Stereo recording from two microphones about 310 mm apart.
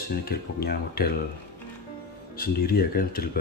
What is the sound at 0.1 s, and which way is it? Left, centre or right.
Speech, left.